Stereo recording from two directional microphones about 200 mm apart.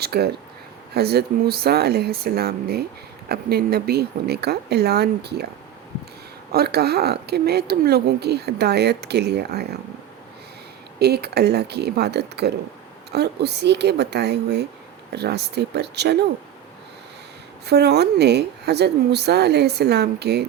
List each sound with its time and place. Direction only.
0.0 s speech: 50° right (ahead or behind)
6.5 s speech: 50° right (ahead or behind)
11.0 s speech: 55° right (ahead or behind)
17.7 s speech: 55° right (ahead or behind)